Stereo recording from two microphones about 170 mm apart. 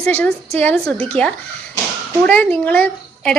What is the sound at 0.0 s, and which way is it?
A woman's voice, 5° left (ahead or behind).